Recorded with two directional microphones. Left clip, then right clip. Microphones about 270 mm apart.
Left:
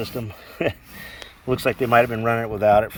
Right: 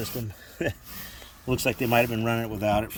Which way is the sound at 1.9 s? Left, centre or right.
Left.